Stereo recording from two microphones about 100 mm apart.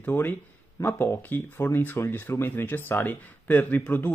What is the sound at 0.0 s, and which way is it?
Speech, 20° left (ahead or behind).